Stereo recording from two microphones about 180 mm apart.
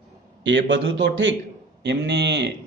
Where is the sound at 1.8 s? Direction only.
75° right (ahead or behind).